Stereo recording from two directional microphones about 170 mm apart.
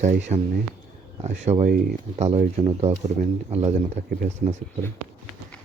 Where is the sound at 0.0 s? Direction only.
45° right (ahead or behind).